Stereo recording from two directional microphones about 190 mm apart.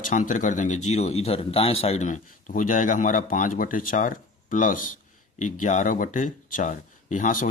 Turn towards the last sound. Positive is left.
turn(degrees=45)  # may be behind; listen again after turning